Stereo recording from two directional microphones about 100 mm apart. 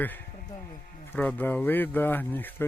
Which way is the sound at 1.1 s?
20° left (ahead or behind).